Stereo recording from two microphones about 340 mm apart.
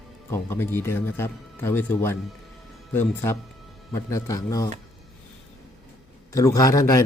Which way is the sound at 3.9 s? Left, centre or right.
Centre.